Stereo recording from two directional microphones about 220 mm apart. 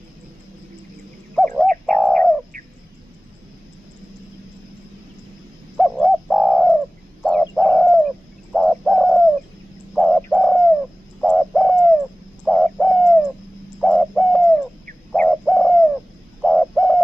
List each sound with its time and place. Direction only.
1.3 s bird: 5° left (ahead or behind)
5.8 s bird: centre (ahead or behind)